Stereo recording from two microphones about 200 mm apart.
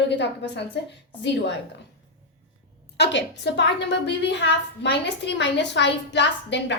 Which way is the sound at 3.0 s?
60° left (ahead or behind).